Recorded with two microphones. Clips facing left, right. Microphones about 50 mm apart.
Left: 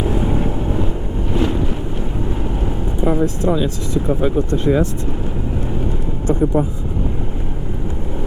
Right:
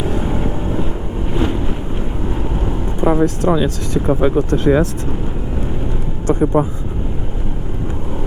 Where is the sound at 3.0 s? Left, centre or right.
Right.